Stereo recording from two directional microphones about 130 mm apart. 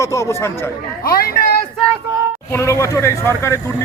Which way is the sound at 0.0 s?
20° left (ahead or behind).